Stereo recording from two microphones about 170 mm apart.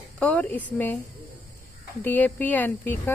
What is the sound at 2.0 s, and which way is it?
Speech, 10° left (ahead or behind).